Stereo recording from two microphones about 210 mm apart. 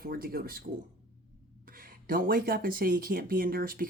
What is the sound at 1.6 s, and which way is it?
Speech, 45° right (ahead or behind).